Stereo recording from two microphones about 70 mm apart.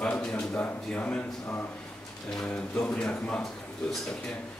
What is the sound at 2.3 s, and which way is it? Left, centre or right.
Speech, centre.